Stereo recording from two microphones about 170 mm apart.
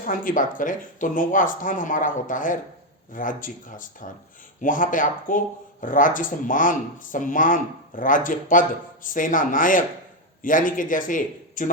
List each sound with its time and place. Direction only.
0.0 s speech: 55° left (ahead or behind)